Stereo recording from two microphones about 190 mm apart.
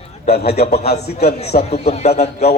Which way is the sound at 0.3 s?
55° left (ahead or behind).